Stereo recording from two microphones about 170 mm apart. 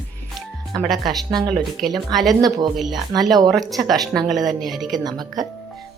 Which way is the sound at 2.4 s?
25° right (ahead or behind).